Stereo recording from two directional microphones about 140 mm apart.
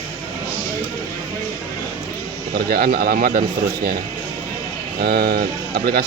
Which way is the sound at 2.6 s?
90° right.